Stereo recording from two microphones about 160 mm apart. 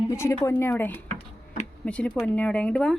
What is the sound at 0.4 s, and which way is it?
Speech, 15° left (ahead or behind).